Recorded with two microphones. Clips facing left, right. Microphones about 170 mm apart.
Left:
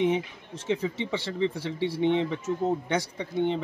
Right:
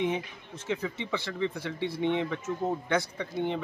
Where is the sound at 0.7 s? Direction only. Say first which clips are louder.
Left 4 dB; 30° left (ahead or behind).